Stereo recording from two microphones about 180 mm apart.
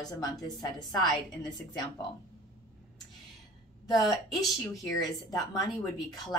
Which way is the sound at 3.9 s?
20° left (ahead or behind).